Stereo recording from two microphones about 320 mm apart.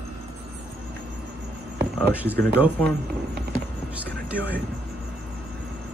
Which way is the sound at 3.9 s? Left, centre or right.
Centre.